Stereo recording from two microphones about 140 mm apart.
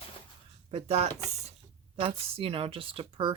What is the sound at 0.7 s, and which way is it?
Speech, 45° right (ahead or behind).